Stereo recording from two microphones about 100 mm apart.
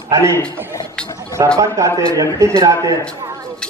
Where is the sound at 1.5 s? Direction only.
30° right (ahead or behind).